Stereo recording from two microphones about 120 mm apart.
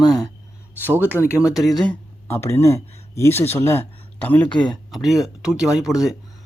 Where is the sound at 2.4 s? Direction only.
20° left (ahead or behind).